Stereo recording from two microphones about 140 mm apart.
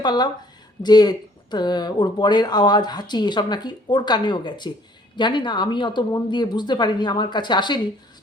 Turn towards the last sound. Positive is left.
turn(degrees=30)  # may be behind; listen again after turning